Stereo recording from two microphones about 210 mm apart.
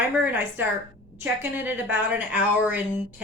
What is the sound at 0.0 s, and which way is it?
A woman's voice, 10° right (ahead or behind).